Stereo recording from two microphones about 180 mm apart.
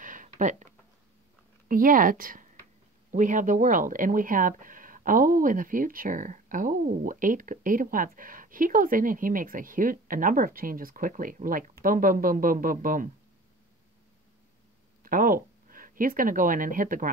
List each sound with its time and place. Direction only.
0.0 s a sound: 45° right (ahead or behind)
1.7 s speech: 50° right (ahead or behind)
15.0 s speech: 50° right (ahead or behind)